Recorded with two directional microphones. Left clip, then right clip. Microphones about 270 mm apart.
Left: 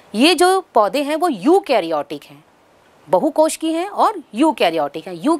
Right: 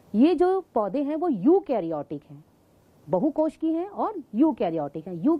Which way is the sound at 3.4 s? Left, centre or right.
Centre.